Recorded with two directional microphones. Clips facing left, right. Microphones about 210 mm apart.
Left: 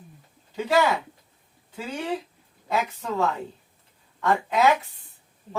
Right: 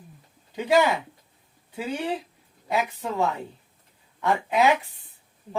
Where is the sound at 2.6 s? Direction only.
15° right (ahead or behind).